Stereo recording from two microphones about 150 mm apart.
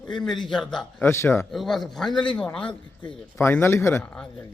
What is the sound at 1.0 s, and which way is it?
Speech, 15° left (ahead or behind).